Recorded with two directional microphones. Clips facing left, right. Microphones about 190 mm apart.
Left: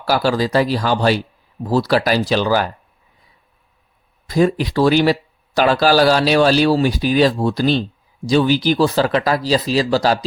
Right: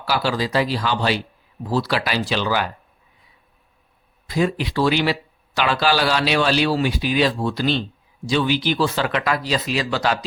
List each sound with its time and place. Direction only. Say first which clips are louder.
0.0 s speech: left 5 dB; 45° left (ahead or behind)
4.3 s speech: left 5 dB; 40° left (ahead or behind)